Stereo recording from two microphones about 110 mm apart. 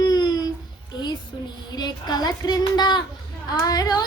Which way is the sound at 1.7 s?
40° left (ahead or behind).